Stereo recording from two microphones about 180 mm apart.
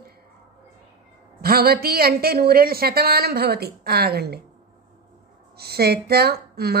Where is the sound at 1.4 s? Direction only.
60° right (ahead or behind).